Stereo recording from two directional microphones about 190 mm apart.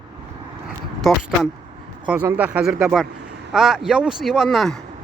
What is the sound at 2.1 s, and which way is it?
Speech, 10° right (ahead or behind).